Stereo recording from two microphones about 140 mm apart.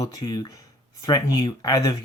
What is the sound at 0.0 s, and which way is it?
Speech, 25° left (ahead or behind).